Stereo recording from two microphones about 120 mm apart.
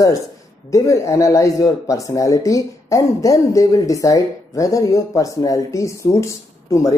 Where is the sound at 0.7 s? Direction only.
25° left (ahead or behind).